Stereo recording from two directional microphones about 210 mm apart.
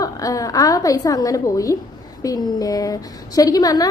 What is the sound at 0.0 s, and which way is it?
A woman's voice, 15° left (ahead or behind).